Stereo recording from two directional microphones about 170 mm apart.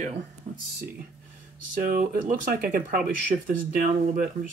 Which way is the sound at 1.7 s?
55° right (ahead or behind).